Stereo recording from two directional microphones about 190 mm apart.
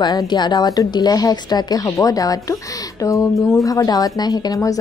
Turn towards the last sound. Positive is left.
turn(degrees=20)  # may be behind; listen again after turning